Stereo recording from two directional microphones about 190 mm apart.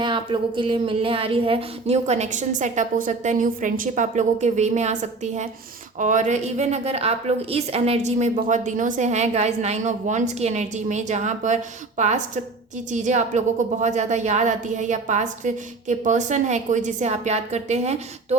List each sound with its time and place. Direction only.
0.0 s a woman's voice: 25° right (ahead or behind)